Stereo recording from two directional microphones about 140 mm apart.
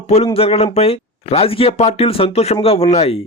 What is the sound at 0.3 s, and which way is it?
Speech, 45° left (ahead or behind).